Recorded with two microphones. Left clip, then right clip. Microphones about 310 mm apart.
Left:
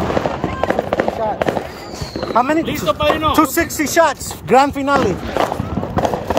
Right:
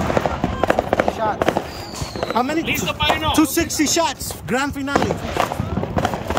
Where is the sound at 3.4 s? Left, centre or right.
Centre.